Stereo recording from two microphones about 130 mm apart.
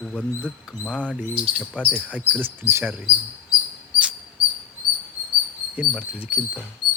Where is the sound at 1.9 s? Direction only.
10° right (ahead or behind).